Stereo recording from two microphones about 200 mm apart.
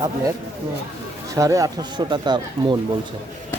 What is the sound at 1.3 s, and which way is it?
Speech, 15° right (ahead or behind).